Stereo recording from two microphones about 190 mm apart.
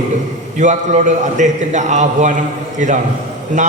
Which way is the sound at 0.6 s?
40° right (ahead or behind).